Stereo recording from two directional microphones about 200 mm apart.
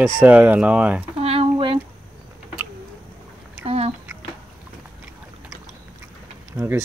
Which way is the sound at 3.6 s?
30° right (ahead or behind).